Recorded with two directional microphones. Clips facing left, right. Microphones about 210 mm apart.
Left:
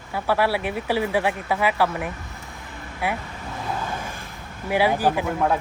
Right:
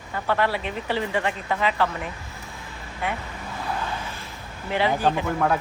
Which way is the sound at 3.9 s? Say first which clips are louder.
Left 1 dB; 50° left (ahead or behind).